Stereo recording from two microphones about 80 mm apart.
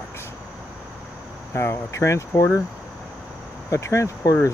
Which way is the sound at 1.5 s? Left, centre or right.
Left.